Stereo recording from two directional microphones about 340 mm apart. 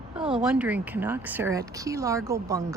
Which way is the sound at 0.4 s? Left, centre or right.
Centre.